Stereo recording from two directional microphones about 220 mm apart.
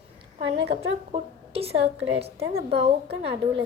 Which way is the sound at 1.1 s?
25° right (ahead or behind).